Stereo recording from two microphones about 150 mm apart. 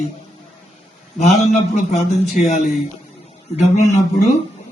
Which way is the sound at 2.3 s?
50° left (ahead or behind).